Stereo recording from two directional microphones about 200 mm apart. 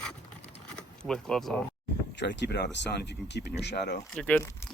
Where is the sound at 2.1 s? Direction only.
60° left (ahead or behind).